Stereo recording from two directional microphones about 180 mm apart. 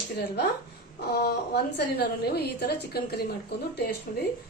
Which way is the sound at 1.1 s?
60° left (ahead or behind).